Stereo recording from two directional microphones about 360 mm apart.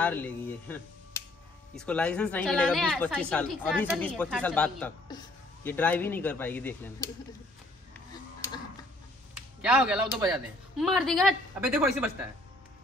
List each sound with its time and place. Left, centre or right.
0.0 s a woman's voice: centre
9.6 s a woman's voice: centre